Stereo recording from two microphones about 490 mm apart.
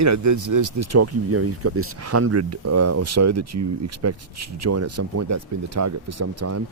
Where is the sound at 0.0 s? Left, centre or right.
Right.